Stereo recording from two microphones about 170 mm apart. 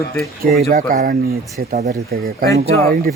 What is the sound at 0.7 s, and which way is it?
Speech, 55° right (ahead or behind).